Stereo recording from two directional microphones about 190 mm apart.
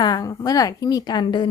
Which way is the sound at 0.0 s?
20° left (ahead or behind).